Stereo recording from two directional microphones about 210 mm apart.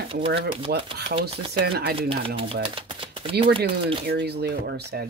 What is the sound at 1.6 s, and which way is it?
Speech, 45° right (ahead or behind).